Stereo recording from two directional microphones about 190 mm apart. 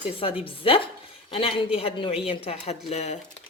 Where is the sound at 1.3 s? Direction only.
30° left (ahead or behind).